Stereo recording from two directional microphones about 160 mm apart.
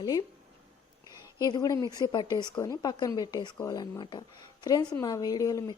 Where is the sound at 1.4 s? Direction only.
25° left (ahead or behind).